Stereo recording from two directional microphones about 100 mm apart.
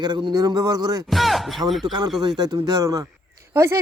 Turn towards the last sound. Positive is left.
turn(degrees=-25)  # may be behind; listen again after turning